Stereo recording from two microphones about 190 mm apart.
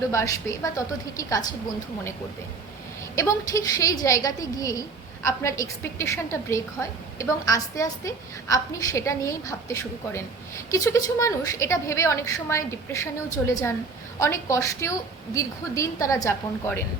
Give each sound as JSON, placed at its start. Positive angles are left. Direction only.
{"t": 0.1, "sound": "a woman's voice", "side_deg": 15}
{"t": 3.2, "sound": "a woman's voice", "side_deg": 15}
{"t": 7.2, "sound": "a woman's voice", "side_deg": 15}